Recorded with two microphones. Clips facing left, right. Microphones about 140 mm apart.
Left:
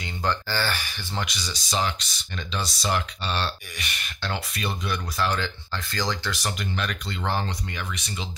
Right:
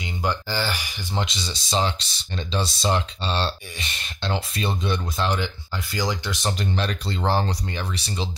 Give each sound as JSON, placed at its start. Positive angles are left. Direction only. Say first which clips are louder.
{"t": 0.0, "sound": "speech", "louder": "right 1 dB", "side_deg": -15}
{"t": 6.6, "sound": "speech", "louder": "right 4 dB", "side_deg": -30}